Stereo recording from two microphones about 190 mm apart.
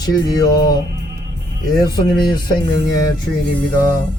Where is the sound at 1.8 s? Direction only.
20° left (ahead or behind).